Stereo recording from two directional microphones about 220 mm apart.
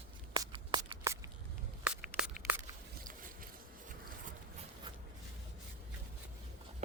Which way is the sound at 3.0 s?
40° right (ahead or behind).